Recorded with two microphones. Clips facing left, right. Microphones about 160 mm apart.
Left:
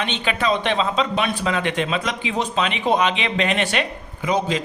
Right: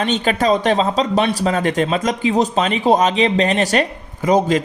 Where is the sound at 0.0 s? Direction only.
40° right (ahead or behind).